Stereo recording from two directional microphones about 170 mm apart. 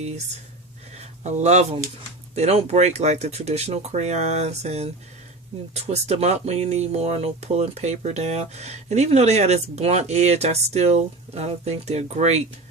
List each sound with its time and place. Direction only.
0.9 s speech: 40° right (ahead or behind)